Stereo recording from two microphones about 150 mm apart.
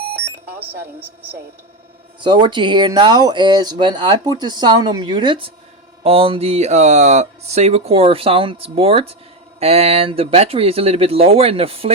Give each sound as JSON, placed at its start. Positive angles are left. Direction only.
{"t": 2.2, "sound": "speech", "side_deg": -30}